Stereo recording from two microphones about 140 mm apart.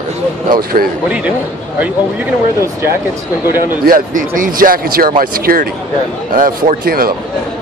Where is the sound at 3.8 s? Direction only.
75° right (ahead or behind).